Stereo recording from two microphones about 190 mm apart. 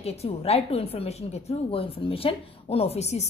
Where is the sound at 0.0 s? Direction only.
35° left (ahead or behind).